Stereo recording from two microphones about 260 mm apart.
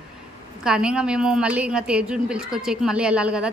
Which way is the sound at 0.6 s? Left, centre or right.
Centre.